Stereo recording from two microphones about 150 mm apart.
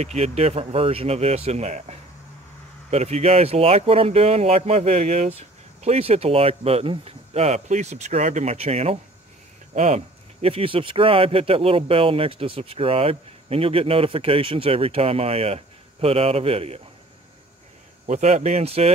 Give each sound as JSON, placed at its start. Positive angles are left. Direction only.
{"t": 0.0, "sound": "speech", "side_deg": -45}
{"t": 18.0, "sound": "speech", "side_deg": -50}